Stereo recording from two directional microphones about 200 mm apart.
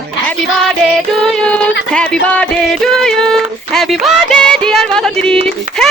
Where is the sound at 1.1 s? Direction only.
5° left (ahead or behind).